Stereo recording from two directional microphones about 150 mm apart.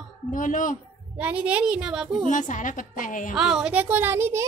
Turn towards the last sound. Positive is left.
turn(degrees=-15)  # may be behind; listen again after turning